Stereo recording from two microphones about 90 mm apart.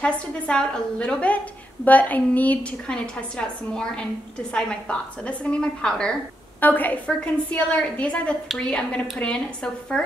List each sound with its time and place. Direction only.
0.0 s a woman's voice: 10° left (ahead or behind)